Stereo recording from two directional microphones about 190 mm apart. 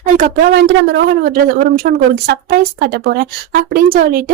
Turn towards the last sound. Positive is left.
turn(degrees=-50)  # may be behind; listen again after turning